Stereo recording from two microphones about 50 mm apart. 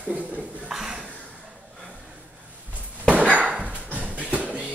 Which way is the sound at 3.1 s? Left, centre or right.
Right.